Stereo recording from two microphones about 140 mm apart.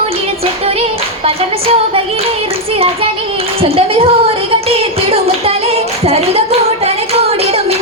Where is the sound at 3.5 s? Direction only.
40° right (ahead or behind).